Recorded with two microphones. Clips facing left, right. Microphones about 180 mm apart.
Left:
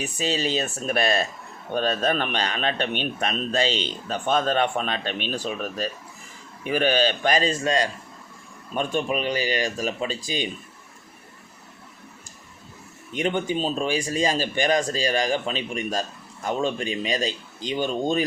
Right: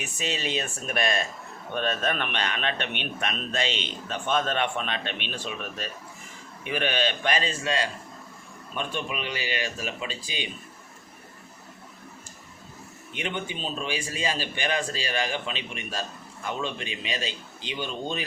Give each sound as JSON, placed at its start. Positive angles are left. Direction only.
{"t": 0.0, "sound": "a man's voice", "side_deg": 35}
{"t": 13.1, "sound": "a man's voice", "side_deg": 40}